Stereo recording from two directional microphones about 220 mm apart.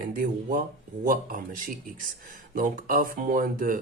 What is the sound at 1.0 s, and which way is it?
Speech, 40° right (ahead or behind).